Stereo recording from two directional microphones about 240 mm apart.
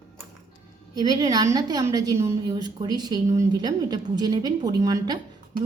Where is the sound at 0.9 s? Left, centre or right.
Centre.